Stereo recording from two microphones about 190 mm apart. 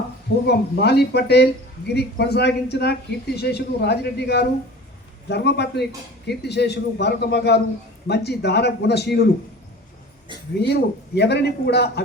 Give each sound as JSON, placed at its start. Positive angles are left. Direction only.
{"t": 0.4, "sound": "a man's voice", "side_deg": 60}
{"t": 10.6, "sound": "a man's voice", "side_deg": 60}